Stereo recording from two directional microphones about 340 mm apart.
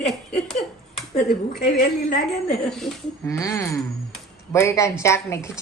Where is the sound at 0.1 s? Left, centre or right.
Centre.